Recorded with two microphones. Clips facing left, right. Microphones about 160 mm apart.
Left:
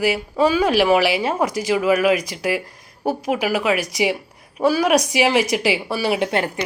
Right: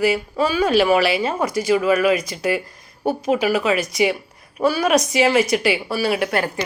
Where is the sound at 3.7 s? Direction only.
80° left.